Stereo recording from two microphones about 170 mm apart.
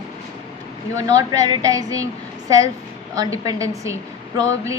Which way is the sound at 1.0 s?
20° right (ahead or behind).